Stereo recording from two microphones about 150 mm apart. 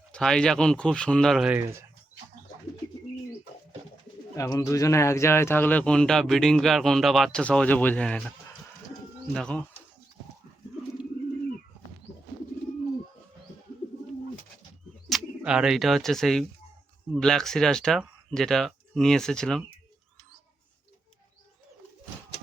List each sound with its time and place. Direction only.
0.1 s speech: 5° left (ahead or behind)
1.5 s speech: 15° right (ahead or behind)
4.4 s speech: 20° left (ahead or behind); by 8.3 s 5° left (ahead or behind)
9.3 s speech: 5° left (ahead or behind)
15.1 s speech: 5° right (ahead or behind)